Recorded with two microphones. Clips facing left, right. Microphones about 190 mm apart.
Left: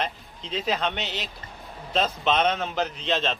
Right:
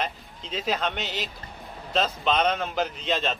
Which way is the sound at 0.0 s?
Centre (ahead or behind).